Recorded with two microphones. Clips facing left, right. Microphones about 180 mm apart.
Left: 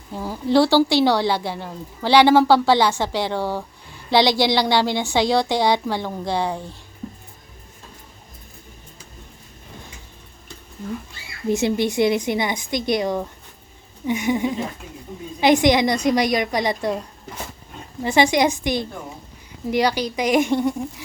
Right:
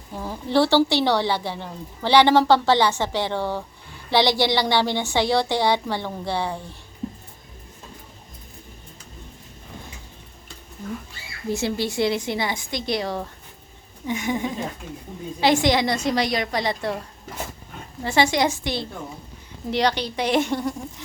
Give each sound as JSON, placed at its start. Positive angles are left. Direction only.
{"t": 0.2, "sound": "speech", "side_deg": 10}
{"t": 11.4, "sound": "a woman's voice", "side_deg": 20}
{"t": 18.0, "sound": "speech", "side_deg": 15}